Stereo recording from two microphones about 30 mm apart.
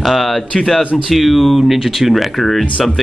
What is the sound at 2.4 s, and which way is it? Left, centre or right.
Speech, centre.